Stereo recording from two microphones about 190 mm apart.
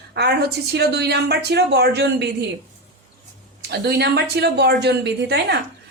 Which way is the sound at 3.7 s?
60° right (ahead or behind).